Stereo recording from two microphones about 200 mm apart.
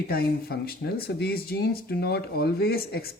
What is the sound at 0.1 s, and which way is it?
Speech, 50° left (ahead or behind).